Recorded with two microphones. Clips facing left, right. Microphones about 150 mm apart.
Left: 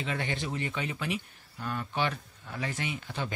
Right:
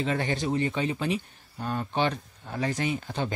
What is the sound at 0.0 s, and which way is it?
Speech, 35° right (ahead or behind).